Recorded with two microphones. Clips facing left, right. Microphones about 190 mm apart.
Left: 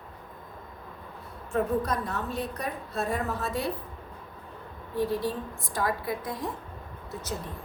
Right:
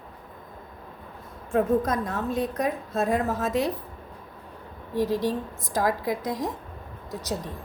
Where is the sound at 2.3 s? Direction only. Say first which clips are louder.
Right 6 dB; 90° right.